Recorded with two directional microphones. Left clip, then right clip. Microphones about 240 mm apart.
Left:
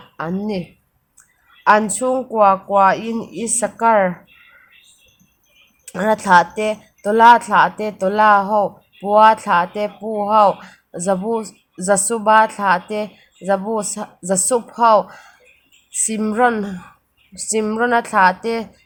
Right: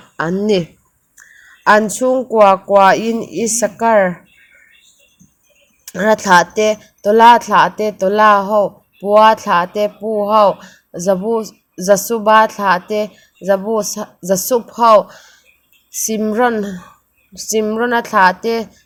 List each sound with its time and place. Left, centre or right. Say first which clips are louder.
0.2 s speech: right 9 dB; centre
1.6 s speech: right 3 dB; centre
5.8 s speech: right 4 dB; centre